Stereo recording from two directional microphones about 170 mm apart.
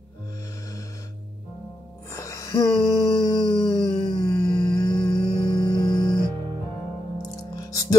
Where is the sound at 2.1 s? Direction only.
20° left (ahead or behind).